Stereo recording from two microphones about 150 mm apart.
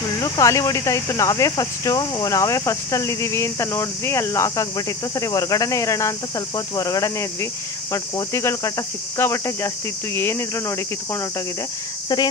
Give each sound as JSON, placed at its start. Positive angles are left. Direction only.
{"t": 0.2, "sound": "speech", "side_deg": 20}